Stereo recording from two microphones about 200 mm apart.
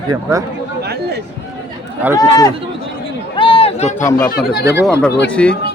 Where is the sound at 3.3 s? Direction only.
25° left (ahead or behind).